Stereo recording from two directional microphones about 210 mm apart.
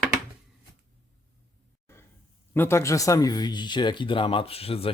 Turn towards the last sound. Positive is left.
turn(degrees=25)  # may be behind; listen again after turning